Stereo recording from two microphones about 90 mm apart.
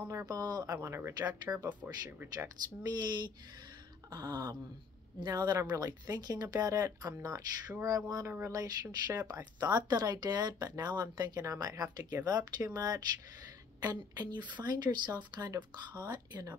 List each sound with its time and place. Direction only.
0.1 s speech: 35° right (ahead or behind)
0.4 s speech: 45° right (ahead or behind)
0.7 s speech: 30° right (ahead or behind)
2.3 s speech: 45° right (ahead or behind)
4.1 s speech: 45° right (ahead or behind)
9.6 s speech: 50° right (ahead or behind)